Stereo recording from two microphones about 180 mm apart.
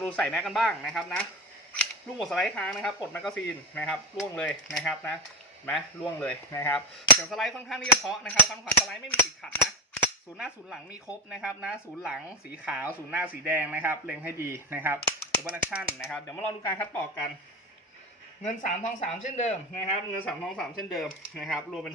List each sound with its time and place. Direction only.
0.0 s speech: 5° left (ahead or behind)
6.7 s speech: centre (ahead or behind)
18.4 s speech: 40° left (ahead or behind)
20.2 s speech: 5° left (ahead or behind)